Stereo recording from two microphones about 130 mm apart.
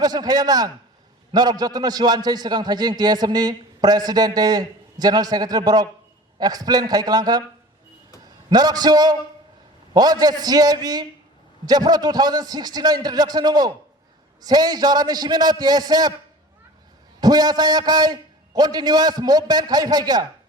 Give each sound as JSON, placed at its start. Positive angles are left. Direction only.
{"t": 0.0, "sound": "a man's voice", "side_deg": -30}
{"t": 17.2, "sound": "a man's voice", "side_deg": -30}